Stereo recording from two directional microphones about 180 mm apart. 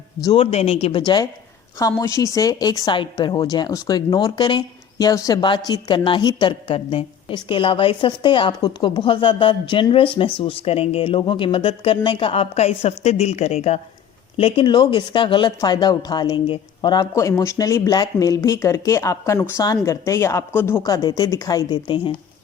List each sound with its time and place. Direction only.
0.3 s speech: 30° left (ahead or behind)